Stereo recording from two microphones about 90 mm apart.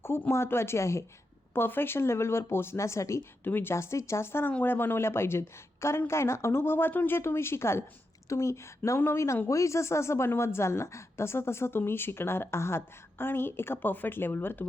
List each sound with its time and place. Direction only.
0.0 s speech: 25° left (ahead or behind)